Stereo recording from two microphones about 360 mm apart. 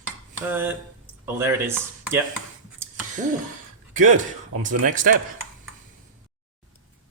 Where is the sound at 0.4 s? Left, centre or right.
Centre.